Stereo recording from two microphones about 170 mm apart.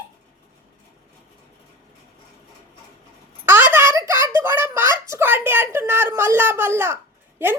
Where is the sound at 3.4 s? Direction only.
10° right (ahead or behind).